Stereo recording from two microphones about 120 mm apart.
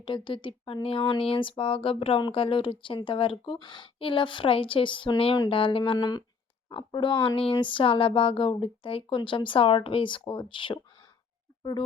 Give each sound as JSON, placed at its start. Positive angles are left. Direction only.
{"t": 0.0, "sound": "speech", "side_deg": 40}